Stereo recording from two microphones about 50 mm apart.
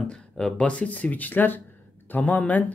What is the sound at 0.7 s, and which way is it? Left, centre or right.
Speech, left.